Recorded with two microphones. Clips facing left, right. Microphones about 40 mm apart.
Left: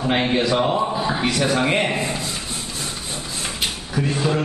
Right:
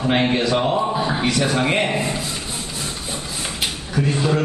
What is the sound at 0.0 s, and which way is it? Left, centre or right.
A man's voice, centre.